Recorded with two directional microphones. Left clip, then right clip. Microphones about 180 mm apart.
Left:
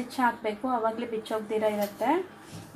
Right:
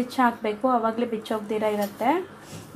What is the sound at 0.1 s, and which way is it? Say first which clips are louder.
Speech: right 3 dB; 40° right (ahead or behind).